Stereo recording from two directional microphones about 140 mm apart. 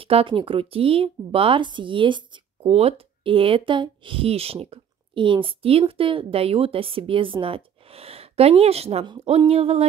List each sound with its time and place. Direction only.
0.0 s speech: 40° right (ahead or behind)
2.7 s speech: 45° right (ahead or behind)